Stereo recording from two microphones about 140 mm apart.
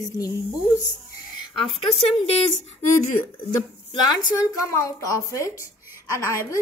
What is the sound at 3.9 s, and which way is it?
A woman's voice, 25° left (ahead or behind).